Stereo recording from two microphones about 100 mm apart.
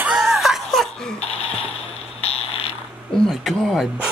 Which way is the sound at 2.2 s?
80° left.